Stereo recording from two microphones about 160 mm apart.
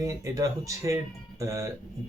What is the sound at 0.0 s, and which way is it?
Speech, 20° right (ahead or behind).